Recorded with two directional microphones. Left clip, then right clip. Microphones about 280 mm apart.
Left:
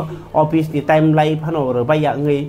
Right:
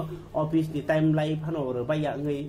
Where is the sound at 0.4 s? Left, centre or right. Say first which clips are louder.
Left 11 dB; left.